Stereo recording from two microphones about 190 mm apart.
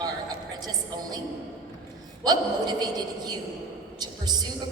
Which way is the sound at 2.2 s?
20° right (ahead or behind).